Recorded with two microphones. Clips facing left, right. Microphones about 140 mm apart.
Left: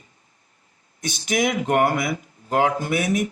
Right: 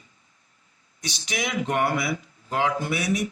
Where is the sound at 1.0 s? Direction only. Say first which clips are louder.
Left 8 dB; 50° left (ahead or behind).